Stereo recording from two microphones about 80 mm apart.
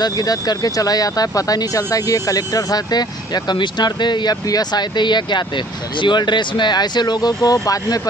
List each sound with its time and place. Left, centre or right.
0.0 s speech: left